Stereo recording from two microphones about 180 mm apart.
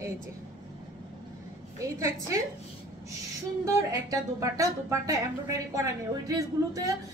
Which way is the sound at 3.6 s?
15° right (ahead or behind).